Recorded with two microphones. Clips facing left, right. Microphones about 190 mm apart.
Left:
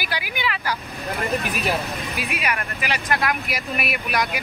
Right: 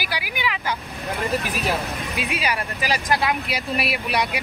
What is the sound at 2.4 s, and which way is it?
Speech, 35° right (ahead or behind).